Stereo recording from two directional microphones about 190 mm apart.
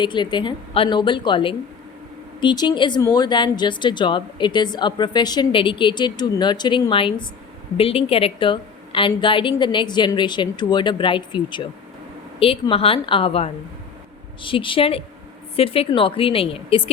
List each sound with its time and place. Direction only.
0.0 s speech: 25° left (ahead or behind)